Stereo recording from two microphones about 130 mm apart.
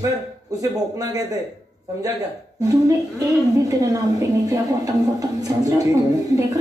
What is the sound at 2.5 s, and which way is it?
A woman's voice, 25° right (ahead or behind).